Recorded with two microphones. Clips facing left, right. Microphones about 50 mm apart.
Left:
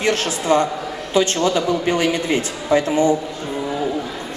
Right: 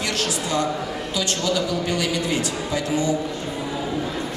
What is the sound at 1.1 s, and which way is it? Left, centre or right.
A woman's voice, left.